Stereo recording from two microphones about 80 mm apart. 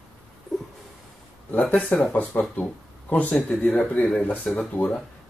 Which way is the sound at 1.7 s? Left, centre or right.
Centre.